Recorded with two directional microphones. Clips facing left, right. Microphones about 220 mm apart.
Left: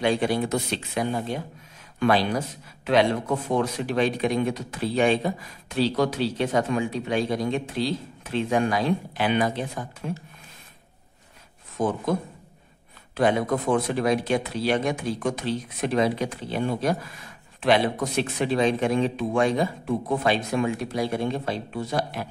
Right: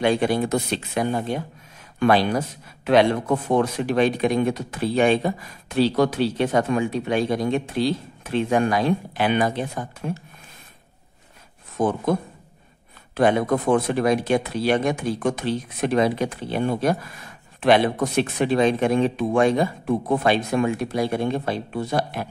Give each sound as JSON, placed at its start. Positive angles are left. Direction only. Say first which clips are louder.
{"t": 0.0, "sound": "speech", "louder": "right 3 dB", "side_deg": -55}
{"t": 13.1, "sound": "speech", "louder": "right 3 dB", "side_deg": -55}